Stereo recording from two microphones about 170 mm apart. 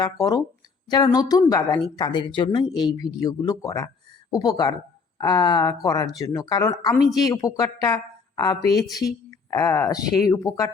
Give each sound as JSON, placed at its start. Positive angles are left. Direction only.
{"t": 0.0, "sound": "a woman's voice", "side_deg": 20}